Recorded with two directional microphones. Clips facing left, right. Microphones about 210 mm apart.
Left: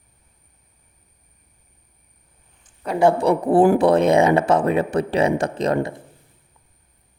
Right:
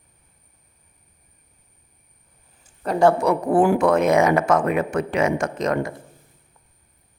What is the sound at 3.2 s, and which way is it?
Speech, 30° left (ahead or behind).